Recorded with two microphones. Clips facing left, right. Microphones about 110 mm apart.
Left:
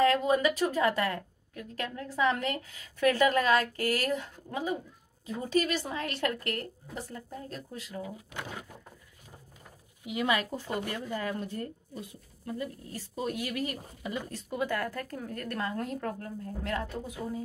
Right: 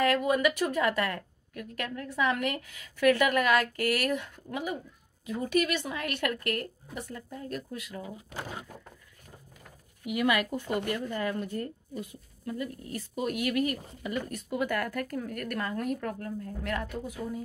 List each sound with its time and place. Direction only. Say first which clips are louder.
0.0 s a woman's voice: left 1 dB; 25° left (ahead or behind)
10.0 s a woman's voice: right 2 dB; 30° left (ahead or behind)
10.9 s speech: right 3 dB; 20° left (ahead or behind)
11.2 s a woman's voice: right 2 dB; 30° left (ahead or behind)